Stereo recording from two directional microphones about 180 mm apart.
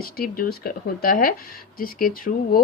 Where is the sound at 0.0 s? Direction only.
55° left (ahead or behind).